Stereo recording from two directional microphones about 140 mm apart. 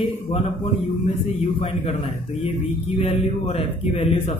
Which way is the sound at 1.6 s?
50° left (ahead or behind).